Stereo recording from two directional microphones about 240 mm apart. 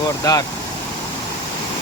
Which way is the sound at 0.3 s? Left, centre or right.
Centre.